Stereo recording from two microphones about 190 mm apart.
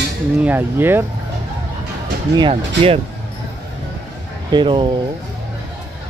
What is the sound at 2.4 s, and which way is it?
Speech, 30° right (ahead or behind).